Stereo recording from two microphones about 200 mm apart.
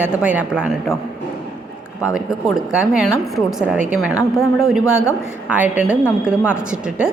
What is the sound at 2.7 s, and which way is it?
A woman's voice, centre (ahead or behind).